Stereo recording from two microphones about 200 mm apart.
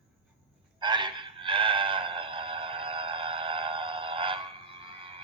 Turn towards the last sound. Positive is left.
turn(degrees=-25)  # may be behind; listen again after turning